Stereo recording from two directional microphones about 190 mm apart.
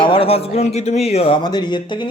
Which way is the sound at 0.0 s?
30° left (ahead or behind).